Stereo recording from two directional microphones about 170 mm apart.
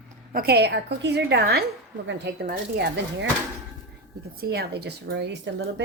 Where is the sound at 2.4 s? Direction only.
70° right (ahead or behind).